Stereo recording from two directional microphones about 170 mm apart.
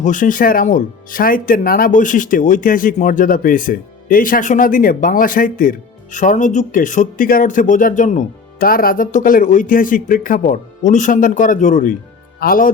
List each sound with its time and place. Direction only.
0.0 s speech: 50° left (ahead or behind)